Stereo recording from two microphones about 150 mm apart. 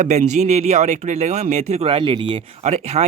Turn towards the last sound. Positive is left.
turn(degrees=-45)  # may be behind; listen again after turning